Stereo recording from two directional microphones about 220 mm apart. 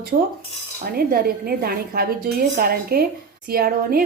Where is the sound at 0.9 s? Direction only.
45° right (ahead or behind).